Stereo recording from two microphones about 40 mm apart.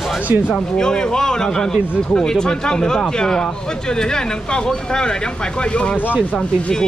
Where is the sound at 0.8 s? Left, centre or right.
Centre.